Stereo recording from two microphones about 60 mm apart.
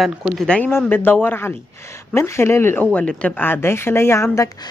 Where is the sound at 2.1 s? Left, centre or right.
Left.